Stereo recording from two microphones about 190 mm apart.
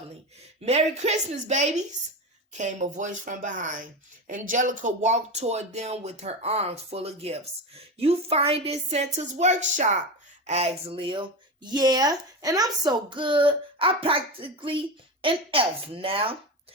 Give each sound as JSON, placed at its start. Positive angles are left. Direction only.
{"t": 0.6, "sound": "speech", "side_deg": -35}